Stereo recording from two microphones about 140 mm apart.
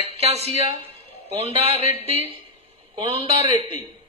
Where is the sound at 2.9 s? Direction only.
40° right (ahead or behind).